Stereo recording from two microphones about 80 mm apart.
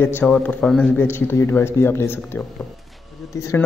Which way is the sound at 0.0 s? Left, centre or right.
Left.